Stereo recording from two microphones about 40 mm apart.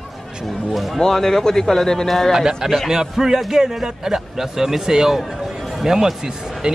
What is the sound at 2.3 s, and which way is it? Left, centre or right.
A man's voice, centre.